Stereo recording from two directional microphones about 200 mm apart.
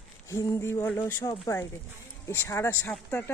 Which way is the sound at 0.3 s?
15° left (ahead or behind).